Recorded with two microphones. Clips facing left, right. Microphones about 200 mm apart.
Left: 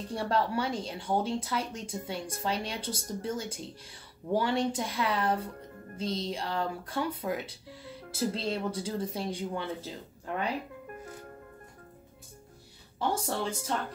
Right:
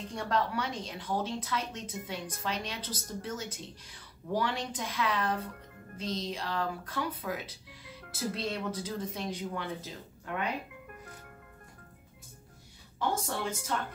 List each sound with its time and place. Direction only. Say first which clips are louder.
0.1 s a woman's voice: left 2 dB; 30° left (ahead or behind)
13.2 s speech: left 2 dB; 30° left (ahead or behind)